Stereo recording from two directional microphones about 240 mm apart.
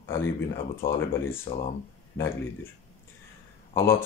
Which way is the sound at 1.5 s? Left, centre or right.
Left.